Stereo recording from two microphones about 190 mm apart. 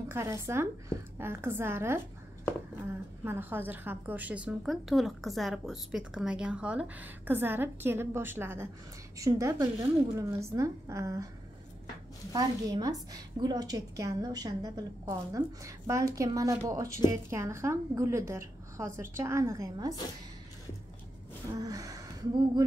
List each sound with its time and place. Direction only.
0.1 s a woman's voice: 15° right (ahead or behind)
12.3 s a woman's voice: 20° right (ahead or behind)
21.5 s gasp: 20° right (ahead or behind)
22.6 s a woman's voice: 15° right (ahead or behind)